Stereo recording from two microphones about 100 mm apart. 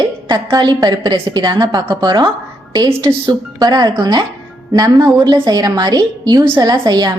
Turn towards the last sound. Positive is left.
turn(degrees=-45)  # may be behind; listen again after turning